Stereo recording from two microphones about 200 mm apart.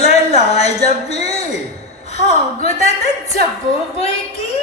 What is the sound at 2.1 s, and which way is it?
Speech, 30° left (ahead or behind).